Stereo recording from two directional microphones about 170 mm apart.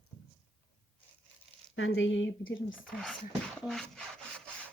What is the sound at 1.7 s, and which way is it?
Speech, 90° left.